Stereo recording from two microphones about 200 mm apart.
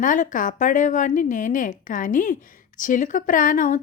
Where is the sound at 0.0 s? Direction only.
40° left (ahead or behind).